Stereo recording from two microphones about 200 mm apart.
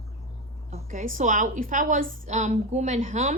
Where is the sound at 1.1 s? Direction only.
40° right (ahead or behind).